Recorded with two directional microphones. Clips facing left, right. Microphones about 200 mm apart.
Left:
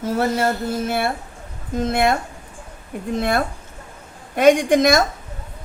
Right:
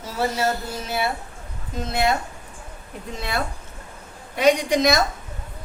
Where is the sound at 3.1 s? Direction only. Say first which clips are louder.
Left 7 dB; 50° left (ahead or behind).